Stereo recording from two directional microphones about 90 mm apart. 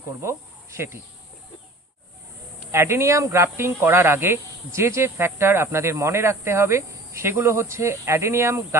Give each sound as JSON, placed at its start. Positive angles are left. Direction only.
{"t": 2.7, "sound": "speech", "side_deg": -30}